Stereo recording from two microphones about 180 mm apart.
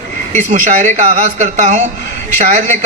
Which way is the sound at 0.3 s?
45° right (ahead or behind).